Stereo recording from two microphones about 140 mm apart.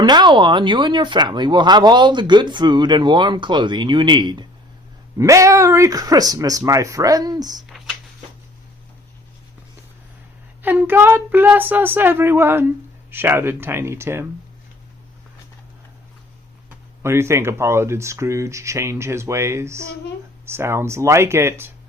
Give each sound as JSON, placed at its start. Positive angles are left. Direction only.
{"t": 0.0, "sound": "speech", "side_deg": -30}
{"t": 5.1, "sound": "speech", "side_deg": -25}
{"t": 10.6, "sound": "speech", "side_deg": -15}
{"t": 16.6, "sound": "speech", "side_deg": -20}